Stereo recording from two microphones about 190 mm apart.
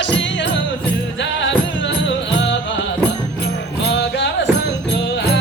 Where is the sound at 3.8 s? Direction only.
65° left (ahead or behind).